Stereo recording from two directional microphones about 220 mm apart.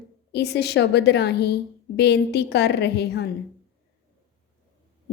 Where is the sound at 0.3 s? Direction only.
50° left (ahead or behind).